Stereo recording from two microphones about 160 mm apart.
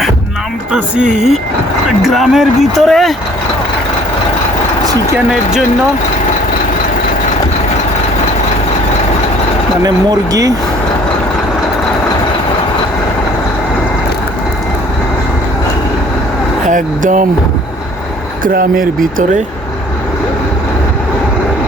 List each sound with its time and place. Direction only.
0.7 s speech: 5° right (ahead or behind)
5.1 s speech: 5° right (ahead or behind)
9.8 s speech: 25° right (ahead or behind)
16.6 s speech: 55° right (ahead or behind)
18.4 s speech: 60° right (ahead or behind)